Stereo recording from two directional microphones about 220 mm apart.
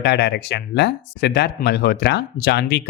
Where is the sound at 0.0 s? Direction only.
50° left (ahead or behind).